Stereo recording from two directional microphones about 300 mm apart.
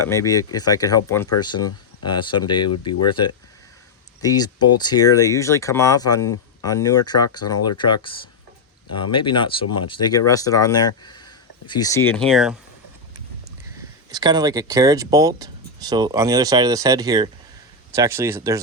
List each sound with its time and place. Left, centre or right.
0.0 s speech: centre
9.1 s speech: centre
14.1 s speech: centre